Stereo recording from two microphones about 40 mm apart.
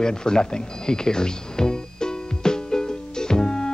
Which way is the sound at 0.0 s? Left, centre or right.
Centre.